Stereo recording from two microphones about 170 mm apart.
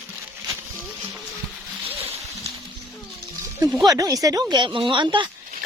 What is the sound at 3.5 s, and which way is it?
Speech, 20° right (ahead or behind).